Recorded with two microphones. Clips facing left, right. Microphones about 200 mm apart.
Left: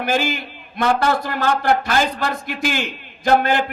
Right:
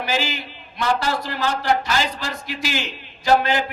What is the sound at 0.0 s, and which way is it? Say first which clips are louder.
A man's voice: left 4 dB; 55° left (ahead or behind).